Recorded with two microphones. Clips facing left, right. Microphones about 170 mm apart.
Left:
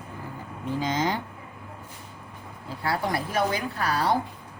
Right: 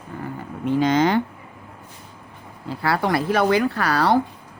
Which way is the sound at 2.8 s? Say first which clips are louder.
Right 6 dB; 80° right.